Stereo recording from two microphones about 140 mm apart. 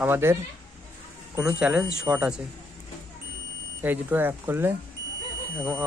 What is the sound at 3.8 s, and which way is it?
Speech, 15° right (ahead or behind).